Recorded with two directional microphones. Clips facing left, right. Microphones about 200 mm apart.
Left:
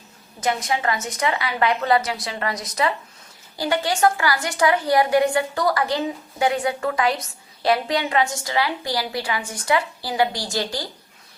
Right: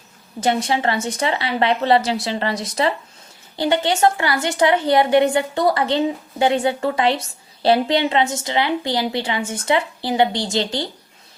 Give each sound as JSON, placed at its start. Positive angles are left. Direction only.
{"t": 0.3, "sound": "a woman's voice", "side_deg": -30}